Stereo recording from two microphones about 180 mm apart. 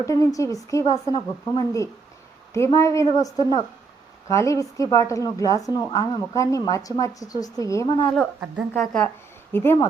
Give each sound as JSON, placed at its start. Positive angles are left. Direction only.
{"t": 0.0, "sound": "a woman's voice", "side_deg": 20}
{"t": 8.4, "sound": "speech", "side_deg": -5}
{"t": 9.5, "sound": "speech", "side_deg": 10}